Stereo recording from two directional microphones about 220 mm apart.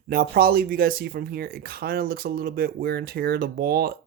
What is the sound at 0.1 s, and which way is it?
Speech, 40° right (ahead or behind).